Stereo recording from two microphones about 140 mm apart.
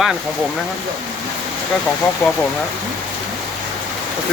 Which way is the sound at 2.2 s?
20° left (ahead or behind).